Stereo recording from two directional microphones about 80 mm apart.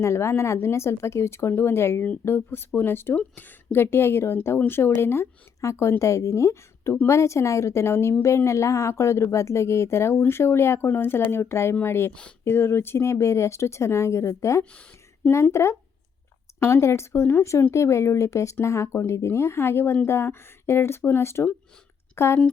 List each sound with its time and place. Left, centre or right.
0.0 s speech: left
14.6 s speech: centre
15.5 s speech: left